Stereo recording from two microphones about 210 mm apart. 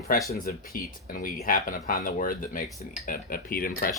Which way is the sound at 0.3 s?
45° left (ahead or behind).